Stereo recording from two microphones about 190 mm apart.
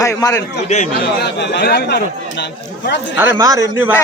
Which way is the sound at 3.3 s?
15° right (ahead or behind).